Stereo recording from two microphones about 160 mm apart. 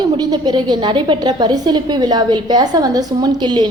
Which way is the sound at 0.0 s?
25° right (ahead or behind).